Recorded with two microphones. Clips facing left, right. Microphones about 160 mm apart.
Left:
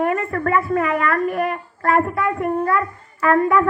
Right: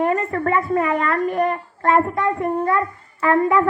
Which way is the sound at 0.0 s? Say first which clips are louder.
Right 1 dB; 25° right (ahead or behind).